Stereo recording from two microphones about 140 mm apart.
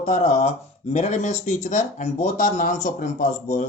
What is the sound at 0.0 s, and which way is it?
Speech, 55° left (ahead or behind).